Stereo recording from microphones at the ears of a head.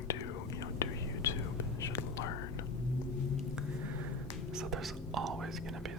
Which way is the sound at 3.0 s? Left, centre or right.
Left.